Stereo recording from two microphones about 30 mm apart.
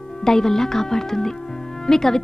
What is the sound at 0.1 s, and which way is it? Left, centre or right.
Speech, centre.